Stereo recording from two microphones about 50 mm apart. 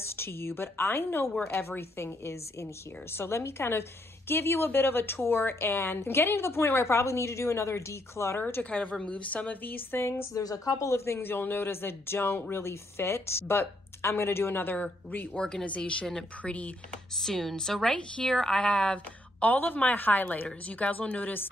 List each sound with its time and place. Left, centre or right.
0.0 s a woman's voice: left
8.6 s a woman's voice: left
10.3 s a woman's voice: left
11.1 s speech: left
14.8 s speech: left
15.3 s a woman's voice: centre
17.2 s a woman's voice: centre
19.4 s a woman's voice: left